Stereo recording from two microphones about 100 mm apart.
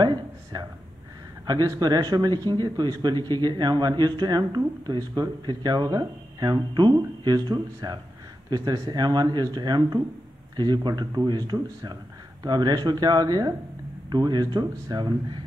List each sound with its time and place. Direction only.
0.0 s speech: 45° right (ahead or behind)